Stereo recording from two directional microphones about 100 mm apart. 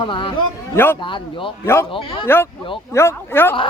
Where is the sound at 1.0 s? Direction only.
55° left (ahead or behind).